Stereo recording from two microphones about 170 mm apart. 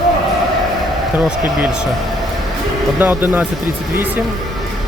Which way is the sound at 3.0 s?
10° right (ahead or behind).